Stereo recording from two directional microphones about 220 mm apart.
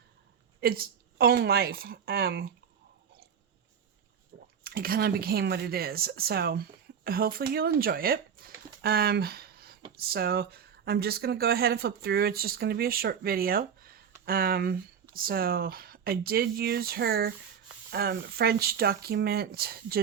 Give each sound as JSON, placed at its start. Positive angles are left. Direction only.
{"t": 0.6, "sound": "a woman's voice", "side_deg": -45}
{"t": 4.6, "sound": "speech", "side_deg": -40}